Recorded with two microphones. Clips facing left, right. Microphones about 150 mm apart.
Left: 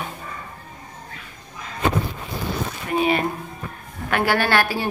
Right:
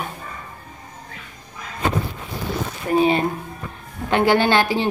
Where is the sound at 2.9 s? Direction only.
30° right (ahead or behind).